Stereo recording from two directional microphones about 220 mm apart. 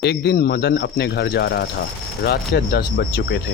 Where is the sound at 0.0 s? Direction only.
50° left (ahead or behind).